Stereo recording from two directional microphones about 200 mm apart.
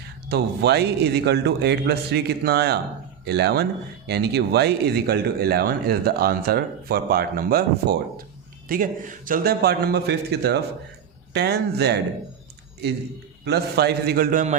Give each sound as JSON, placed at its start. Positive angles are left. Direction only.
{"t": 0.3, "sound": "a man's voice", "side_deg": -55}
{"t": 13.4, "sound": "speech", "side_deg": -55}